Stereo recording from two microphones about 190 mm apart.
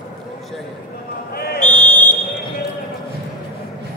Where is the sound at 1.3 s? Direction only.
55° left (ahead or behind).